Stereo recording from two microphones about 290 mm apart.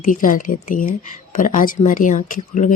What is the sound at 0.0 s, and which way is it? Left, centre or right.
Speech, left.